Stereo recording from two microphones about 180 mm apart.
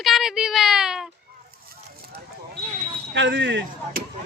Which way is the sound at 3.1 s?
85° right.